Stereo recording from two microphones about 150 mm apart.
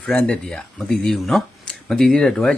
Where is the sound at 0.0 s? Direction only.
10° left (ahead or behind).